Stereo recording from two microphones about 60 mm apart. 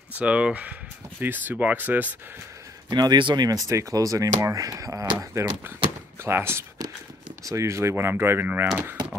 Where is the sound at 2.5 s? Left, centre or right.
Right.